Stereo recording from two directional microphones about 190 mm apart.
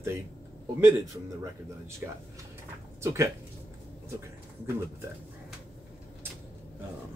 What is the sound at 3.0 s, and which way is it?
Speech, 15° right (ahead or behind).